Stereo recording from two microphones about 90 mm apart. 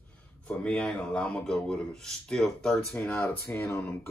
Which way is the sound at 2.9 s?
30° left (ahead or behind).